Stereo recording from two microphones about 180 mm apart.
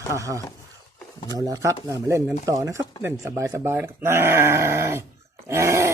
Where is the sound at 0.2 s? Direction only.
15° right (ahead or behind).